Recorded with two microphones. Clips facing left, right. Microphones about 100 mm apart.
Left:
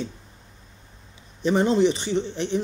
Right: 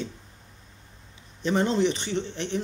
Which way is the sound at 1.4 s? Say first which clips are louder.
Left 4 dB; 15° left (ahead or behind).